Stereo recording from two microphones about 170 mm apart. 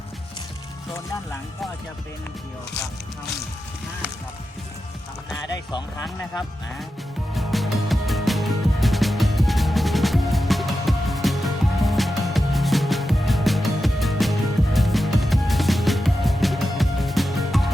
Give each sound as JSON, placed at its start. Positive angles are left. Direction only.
{"t": 5.7, "sound": "speech", "side_deg": 20}
{"t": 7.3, "sound": "music", "side_deg": 0}